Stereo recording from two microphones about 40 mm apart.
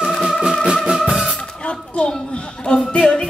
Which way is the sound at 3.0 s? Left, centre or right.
Centre.